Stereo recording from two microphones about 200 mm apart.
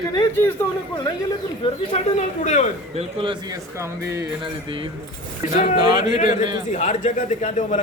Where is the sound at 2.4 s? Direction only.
35° left (ahead or behind).